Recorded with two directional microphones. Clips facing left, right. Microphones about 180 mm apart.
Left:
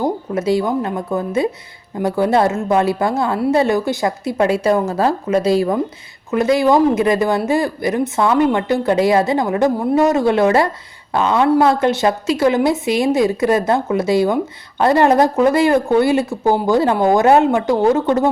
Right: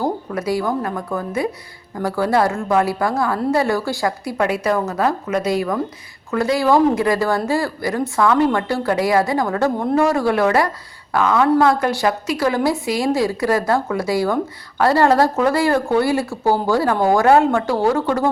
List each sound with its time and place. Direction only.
0.0 s speech: 25° left (ahead or behind)